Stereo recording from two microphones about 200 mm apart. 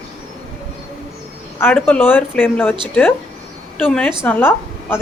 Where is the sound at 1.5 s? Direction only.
10° left (ahead or behind).